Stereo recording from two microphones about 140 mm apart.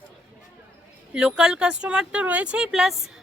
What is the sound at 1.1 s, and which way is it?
Speech, 5° right (ahead or behind).